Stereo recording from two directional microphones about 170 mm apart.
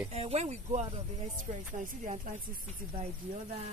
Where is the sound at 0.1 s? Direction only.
40° right (ahead or behind).